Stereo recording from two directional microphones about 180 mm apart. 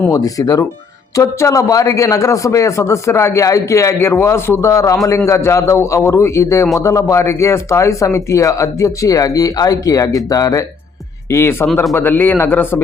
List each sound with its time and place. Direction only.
0.0 s a man's voice: 20° left (ahead or behind)